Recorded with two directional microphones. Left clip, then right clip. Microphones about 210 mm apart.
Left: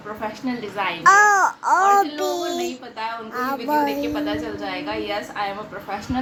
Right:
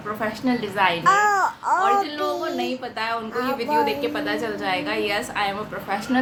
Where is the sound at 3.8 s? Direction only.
20° right (ahead or behind).